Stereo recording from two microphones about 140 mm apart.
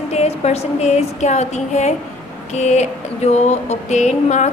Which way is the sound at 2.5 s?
55° left (ahead or behind).